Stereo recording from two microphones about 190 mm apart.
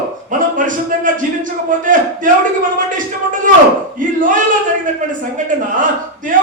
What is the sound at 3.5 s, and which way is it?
Speech, 45° right (ahead or behind).